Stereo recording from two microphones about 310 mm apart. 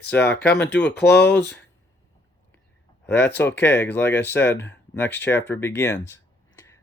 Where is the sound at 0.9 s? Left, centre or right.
Left.